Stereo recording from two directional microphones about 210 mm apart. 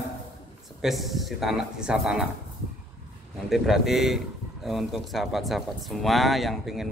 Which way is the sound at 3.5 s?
Centre (ahead or behind).